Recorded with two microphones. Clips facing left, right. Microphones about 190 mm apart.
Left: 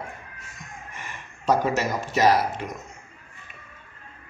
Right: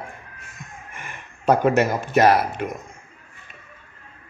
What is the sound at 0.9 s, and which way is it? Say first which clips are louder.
Speech: right 1 dB; 55° right (ahead or behind).